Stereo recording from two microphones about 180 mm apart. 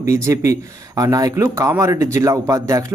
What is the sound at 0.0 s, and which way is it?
Speech, 15° right (ahead or behind).